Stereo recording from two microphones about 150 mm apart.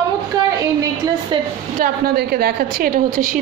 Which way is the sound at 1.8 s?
90° right.